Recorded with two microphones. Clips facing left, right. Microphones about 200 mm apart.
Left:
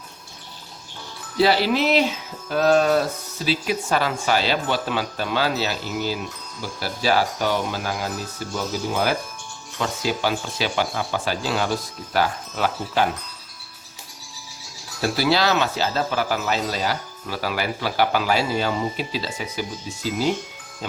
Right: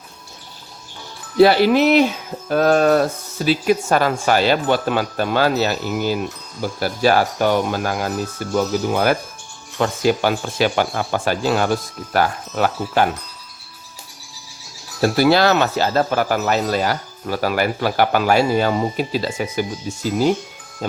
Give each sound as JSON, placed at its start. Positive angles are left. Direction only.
{"t": 1.4, "sound": "speech", "side_deg": -55}
{"t": 15.0, "sound": "speech", "side_deg": -50}